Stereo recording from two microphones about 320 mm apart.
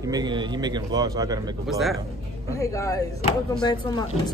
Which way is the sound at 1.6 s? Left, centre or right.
Centre.